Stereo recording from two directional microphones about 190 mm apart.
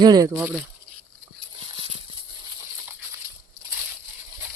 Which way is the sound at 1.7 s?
25° right (ahead or behind).